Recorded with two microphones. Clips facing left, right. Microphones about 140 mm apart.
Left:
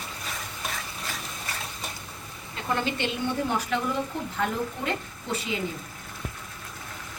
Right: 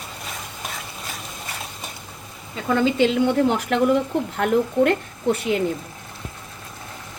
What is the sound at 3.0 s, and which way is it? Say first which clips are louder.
Speech: right 10 dB; 85° right.